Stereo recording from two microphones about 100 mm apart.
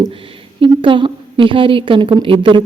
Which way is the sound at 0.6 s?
60° right (ahead or behind).